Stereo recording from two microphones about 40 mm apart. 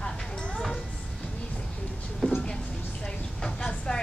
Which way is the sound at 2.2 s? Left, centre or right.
Centre.